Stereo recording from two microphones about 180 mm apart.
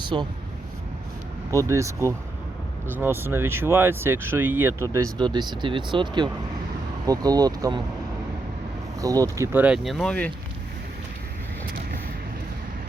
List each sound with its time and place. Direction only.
0.0 s speech: 25° right (ahead or behind)
1.6 s speech: 15° right (ahead or behind)
9.0 s speech: 20° right (ahead or behind); by 10.3 s 5° left (ahead or behind)